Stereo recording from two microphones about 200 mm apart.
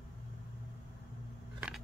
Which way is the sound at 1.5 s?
5° right (ahead or behind).